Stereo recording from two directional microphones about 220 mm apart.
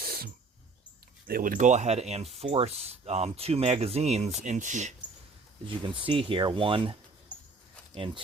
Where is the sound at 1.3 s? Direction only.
40° right (ahead or behind).